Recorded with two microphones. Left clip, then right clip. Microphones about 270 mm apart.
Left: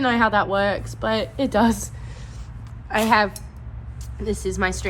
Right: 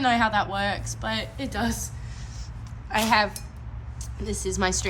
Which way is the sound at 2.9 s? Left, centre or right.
Centre.